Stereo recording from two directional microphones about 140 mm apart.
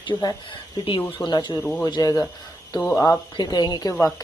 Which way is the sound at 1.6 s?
10° left (ahead or behind).